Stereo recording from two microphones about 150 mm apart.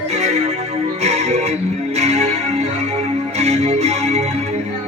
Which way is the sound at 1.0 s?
45° right (ahead or behind).